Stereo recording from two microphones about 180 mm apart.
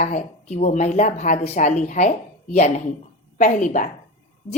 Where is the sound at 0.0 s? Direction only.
40° left (ahead or behind).